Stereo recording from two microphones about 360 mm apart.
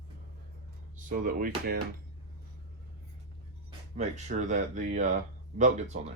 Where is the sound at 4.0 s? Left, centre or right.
Centre.